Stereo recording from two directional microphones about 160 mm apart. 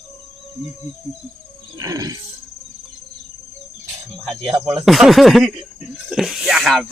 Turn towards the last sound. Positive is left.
turn(degrees=0)  # may be behind; listen again after turning